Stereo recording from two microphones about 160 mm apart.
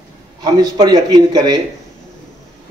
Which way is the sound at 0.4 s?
25° right (ahead or behind).